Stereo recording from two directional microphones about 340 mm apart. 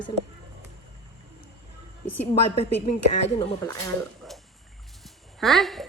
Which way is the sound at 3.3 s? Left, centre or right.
Centre.